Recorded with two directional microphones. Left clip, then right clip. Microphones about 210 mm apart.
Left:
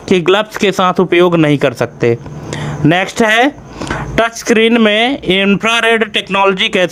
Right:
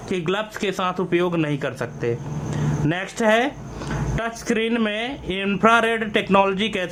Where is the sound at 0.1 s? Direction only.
40° left (ahead or behind).